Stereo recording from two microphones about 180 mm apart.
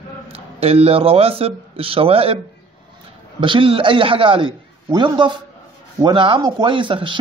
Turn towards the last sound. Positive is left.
turn(degrees=-25)  # may be behind; listen again after turning